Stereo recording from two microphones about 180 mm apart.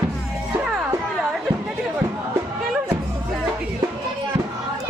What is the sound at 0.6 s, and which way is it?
Music, centre (ahead or behind).